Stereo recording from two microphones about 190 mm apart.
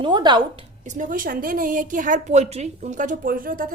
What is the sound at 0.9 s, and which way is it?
A woman's voice, 45° right (ahead or behind).